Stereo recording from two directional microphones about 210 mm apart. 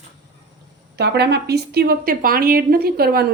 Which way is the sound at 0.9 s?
50° right (ahead or behind).